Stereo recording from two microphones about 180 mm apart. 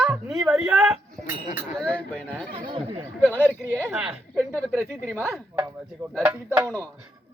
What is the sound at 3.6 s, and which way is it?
Speech, 10° left (ahead or behind).